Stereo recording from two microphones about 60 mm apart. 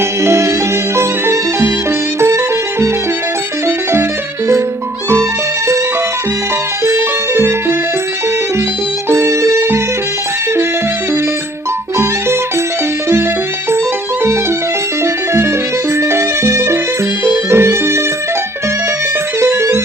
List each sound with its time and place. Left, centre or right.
0.2 s music: right
6.8 s music: right
9.0 s music: right
15.0 s music: right
19.4 s music: right